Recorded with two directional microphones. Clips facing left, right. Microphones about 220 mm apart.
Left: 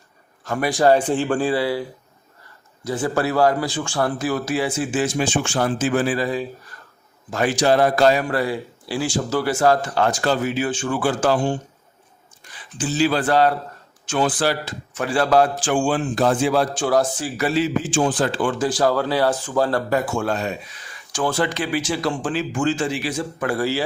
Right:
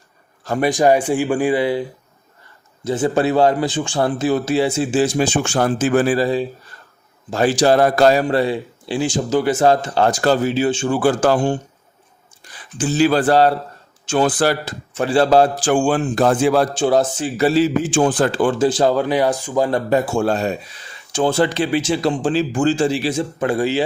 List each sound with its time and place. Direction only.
0.4 s a man's voice: 25° right (ahead or behind); by 6.1 s 45° right (ahead or behind)
6.1 s a man's voice: 30° right (ahead or behind)
8.2 s a man's voice: 25° right (ahead or behind)
11.0 s a man's voice: 45° right (ahead or behind)
12.7 s a man's voice: 50° right (ahead or behind); by 13.6 s 35° right (ahead or behind)
14.2 s a man's voice: 45° right (ahead or behind)
14.9 s a man's voice: 30° right (ahead or behind)
15.8 s a man's voice: 50° right (ahead or behind)
16.7 s a man's voice: 25° right (ahead or behind)
17.9 s a man's voice: 55° right (ahead or behind)
18.6 s a man's voice: 25° right (ahead or behind)
21.1 s a man's voice: 25° right (ahead or behind)